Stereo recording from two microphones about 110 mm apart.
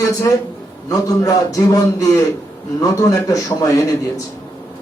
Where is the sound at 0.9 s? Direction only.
35° left (ahead or behind).